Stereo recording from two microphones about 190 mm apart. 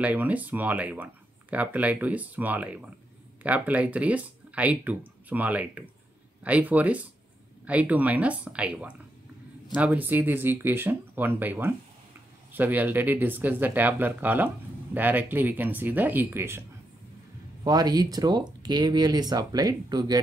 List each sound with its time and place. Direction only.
0.0 s speech: 10° right (ahead or behind)
17.6 s speech: 20° right (ahead or behind)